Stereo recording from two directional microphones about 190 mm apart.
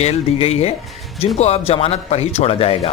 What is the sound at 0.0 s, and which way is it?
Speech, 35° left (ahead or behind).